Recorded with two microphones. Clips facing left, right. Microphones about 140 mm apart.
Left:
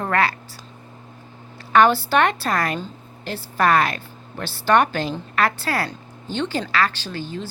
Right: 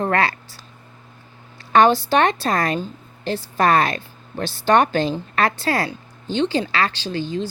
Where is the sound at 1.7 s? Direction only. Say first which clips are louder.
Right 1 dB; 25° right (ahead or behind).